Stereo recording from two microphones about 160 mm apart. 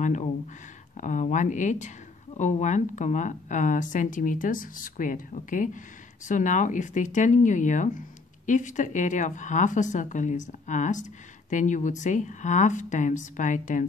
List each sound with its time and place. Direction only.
0.0 s speech: 45° left (ahead or behind)